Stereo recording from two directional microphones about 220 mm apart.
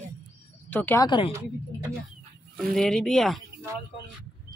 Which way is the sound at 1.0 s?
20° left (ahead or behind).